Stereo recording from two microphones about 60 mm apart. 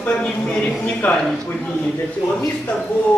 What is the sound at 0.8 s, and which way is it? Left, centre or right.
Speech, left.